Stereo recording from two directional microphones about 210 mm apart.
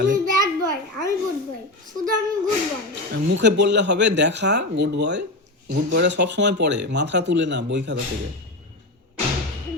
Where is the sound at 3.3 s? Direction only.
55° right (ahead or behind).